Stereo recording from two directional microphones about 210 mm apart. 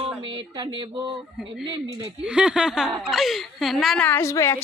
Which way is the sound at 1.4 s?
Centre (ahead or behind).